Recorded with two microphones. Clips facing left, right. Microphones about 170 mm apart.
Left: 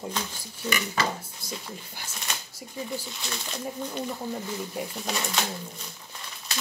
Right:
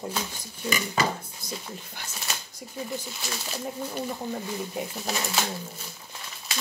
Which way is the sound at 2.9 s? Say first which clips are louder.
Even; 5° right (ahead or behind).